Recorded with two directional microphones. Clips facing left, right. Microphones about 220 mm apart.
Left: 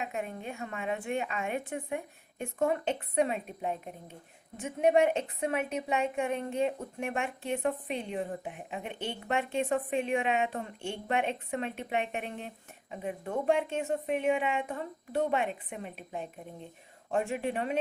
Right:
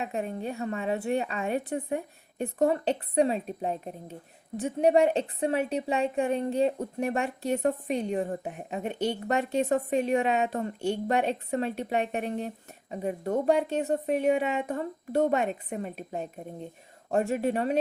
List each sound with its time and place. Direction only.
0.0 s a woman's voice: 35° right (ahead or behind)